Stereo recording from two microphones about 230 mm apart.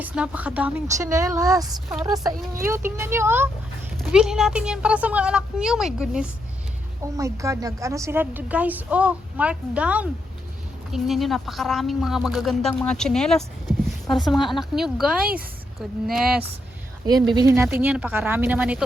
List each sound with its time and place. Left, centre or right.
0.0 s a woman's voice: centre
7.2 s a woman's voice: centre
15.2 s speech: right
15.8 s speech: centre
17.3 s a woman's voice: centre